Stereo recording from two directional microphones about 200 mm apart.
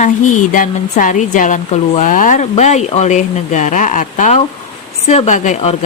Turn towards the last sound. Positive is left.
turn(degrees=35)  # may be behind; listen again after turning